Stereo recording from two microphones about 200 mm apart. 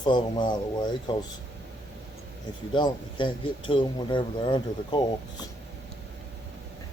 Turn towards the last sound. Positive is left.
turn(degrees=20)  # may be behind; listen again after turning